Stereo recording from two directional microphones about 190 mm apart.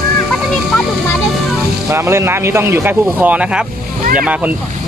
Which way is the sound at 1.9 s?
15° right (ahead or behind).